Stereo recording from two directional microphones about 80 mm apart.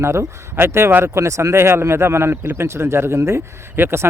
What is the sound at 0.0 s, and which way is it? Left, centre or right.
Speech, right.